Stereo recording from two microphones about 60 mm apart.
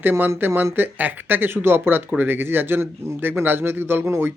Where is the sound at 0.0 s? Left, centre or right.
Right.